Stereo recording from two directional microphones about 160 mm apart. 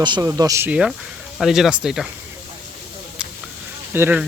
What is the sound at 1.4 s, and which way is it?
Speech, centre (ahead or behind).